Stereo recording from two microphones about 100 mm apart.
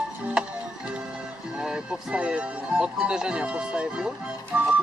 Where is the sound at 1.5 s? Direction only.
5° right (ahead or behind).